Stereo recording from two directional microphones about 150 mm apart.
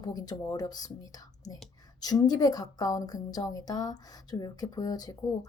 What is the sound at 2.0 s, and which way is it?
Speech, 25° left (ahead or behind).